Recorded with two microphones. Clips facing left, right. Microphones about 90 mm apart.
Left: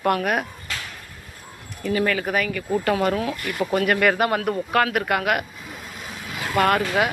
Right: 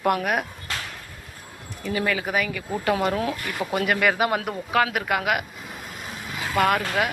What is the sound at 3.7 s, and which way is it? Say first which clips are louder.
A man's voice: left 2 dB; 10° right (ahead or behind).